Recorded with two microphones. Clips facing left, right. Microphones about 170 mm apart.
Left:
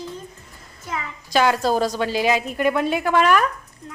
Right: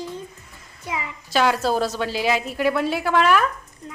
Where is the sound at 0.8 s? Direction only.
15° right (ahead or behind).